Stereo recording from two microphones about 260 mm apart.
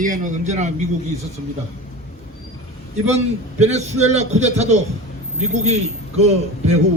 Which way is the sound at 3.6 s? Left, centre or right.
Right.